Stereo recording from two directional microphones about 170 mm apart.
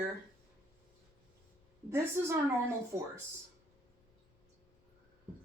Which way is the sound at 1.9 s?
15° right (ahead or behind).